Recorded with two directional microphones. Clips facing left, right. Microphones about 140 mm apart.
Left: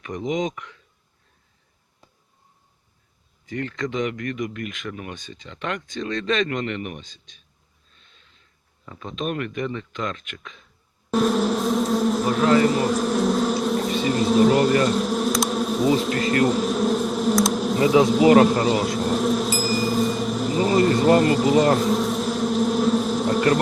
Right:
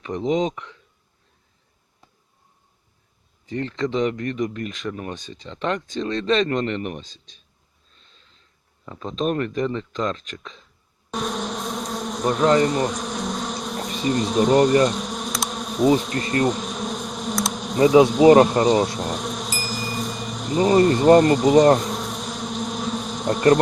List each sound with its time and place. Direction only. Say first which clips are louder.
0.0 s speech: right 3 dB; 30° right (ahead or behind)
3.4 s speech: right 3 dB; 30° right (ahead or behind)
8.9 s speech: right 4 dB; 35° right (ahead or behind)
11.1 s a sound: left 7 dB; centre (ahead or behind)
16.4 s bee: left 3 dB; 5° left (ahead or behind)
18.4 s insect: right 2 dB; 5° left (ahead or behind)
20.8 s bee: right 3 dB; 5° left (ahead or behind)